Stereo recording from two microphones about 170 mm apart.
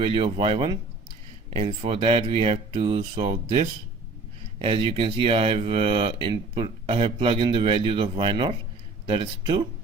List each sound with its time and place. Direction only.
0.0 s speech: 30° right (ahead or behind)